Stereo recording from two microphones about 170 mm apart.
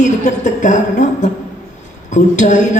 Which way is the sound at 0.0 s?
45° left (ahead or behind).